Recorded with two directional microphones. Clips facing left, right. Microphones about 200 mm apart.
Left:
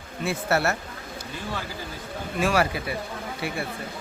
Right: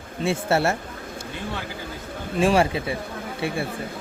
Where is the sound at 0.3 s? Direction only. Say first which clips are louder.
Right 3 dB; 25° right (ahead or behind).